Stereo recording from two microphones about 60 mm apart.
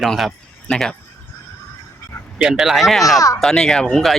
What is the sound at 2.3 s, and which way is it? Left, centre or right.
Speech, centre.